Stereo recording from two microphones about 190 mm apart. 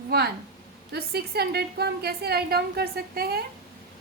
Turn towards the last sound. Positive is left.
turn(degrees=-55)  # may be behind; listen again after turning